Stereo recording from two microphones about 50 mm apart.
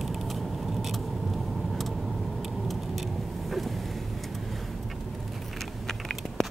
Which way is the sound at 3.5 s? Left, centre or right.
Centre.